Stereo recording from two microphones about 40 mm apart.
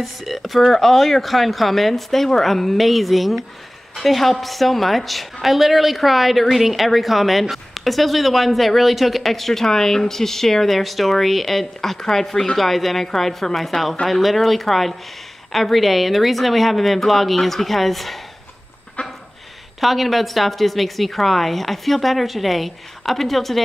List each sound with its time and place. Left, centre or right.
0.0 s a woman's voice: centre
19.0 s a sound: left
19.8 s a woman's voice: centre